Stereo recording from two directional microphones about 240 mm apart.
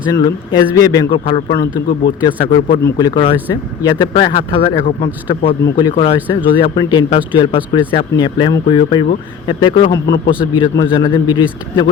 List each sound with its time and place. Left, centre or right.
0.2 s speech: centre
1.5 s speech: left
2.0 s speech: centre